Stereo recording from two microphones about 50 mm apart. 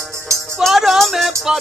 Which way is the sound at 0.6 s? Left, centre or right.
Centre.